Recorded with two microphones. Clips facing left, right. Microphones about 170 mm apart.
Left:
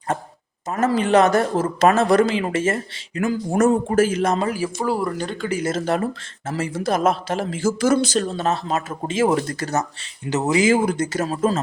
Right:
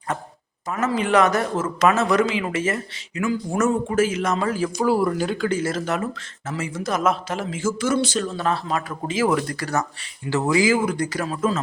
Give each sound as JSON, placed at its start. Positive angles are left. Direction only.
{"t": 0.7, "sound": "a man's voice", "side_deg": 40}
{"t": 1.0, "sound": "speech", "side_deg": 25}
{"t": 2.7, "sound": "speech", "side_deg": 50}
{"t": 3.6, "sound": "speech", "side_deg": 40}
{"t": 4.4, "sound": "speech", "side_deg": 10}
{"t": 5.5, "sound": "speech", "side_deg": 15}
{"t": 5.7, "sound": "speech", "side_deg": 30}
{"t": 8.4, "sound": "speech", "side_deg": 25}